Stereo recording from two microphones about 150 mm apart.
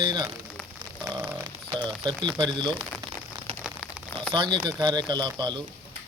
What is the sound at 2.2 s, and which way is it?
Speech, 30° right (ahead or behind).